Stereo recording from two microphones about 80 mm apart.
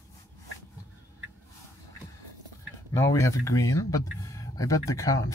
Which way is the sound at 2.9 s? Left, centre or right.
Left.